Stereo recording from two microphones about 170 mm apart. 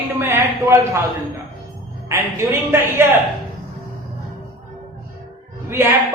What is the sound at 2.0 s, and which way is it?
Speech, 15° right (ahead or behind).